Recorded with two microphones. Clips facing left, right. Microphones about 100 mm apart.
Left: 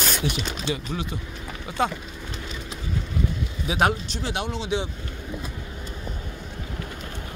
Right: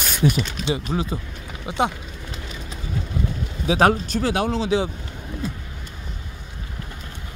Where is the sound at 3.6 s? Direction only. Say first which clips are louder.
Right 5 dB; 40° right (ahead or behind).